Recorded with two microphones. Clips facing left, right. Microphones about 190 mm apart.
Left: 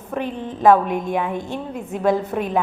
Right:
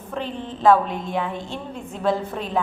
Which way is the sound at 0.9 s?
50° left (ahead or behind).